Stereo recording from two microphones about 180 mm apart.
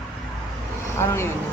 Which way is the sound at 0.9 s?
15° left (ahead or behind).